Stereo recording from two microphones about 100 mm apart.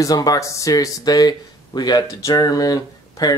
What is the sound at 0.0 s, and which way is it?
Speech, 40° left (ahead or behind).